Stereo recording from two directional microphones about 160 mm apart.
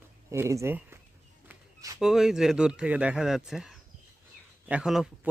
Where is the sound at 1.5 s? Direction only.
20° right (ahead or behind).